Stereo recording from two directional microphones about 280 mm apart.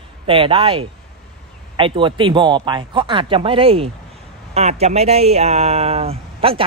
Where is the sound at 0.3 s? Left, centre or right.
Centre.